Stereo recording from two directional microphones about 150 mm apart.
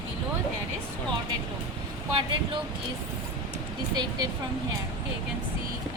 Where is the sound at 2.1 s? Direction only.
35° right (ahead or behind).